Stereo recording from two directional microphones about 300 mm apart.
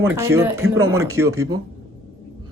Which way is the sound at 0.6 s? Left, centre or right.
Right.